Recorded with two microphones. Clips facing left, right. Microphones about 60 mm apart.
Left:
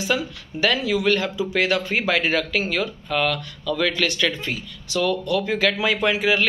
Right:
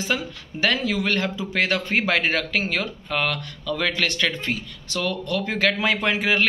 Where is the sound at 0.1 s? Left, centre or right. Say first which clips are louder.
Left 3 dB; right.